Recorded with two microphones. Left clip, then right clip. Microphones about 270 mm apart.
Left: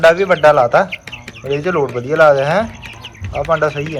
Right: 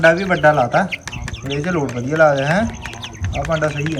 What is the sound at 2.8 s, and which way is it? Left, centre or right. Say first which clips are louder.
Bird: right 2 dB; centre.